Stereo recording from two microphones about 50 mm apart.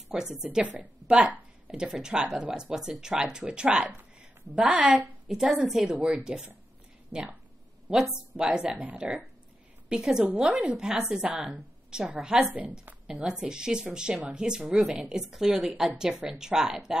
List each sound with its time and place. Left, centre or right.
0.1 s speech: centre
5.9 s speech: centre
7.1 s speech: right
8.1 s a woman's voice: right